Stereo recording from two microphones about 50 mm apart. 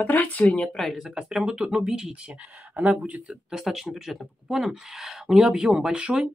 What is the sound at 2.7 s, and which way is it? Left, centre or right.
Speech, right.